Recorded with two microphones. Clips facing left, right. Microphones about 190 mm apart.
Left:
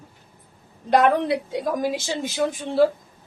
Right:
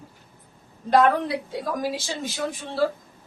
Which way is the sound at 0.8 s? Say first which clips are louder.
Left 1 dB; 20° left (ahead or behind).